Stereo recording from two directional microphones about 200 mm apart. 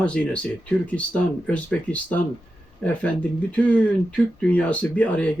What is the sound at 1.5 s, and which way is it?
Speech, 5° left (ahead or behind).